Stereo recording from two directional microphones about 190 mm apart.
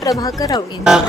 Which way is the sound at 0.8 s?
5° right (ahead or behind).